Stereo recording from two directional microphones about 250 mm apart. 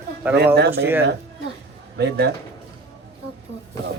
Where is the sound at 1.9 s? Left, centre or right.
Right.